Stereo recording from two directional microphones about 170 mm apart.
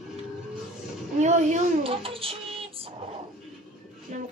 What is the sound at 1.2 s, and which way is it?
Child singing, 45° right (ahead or behind).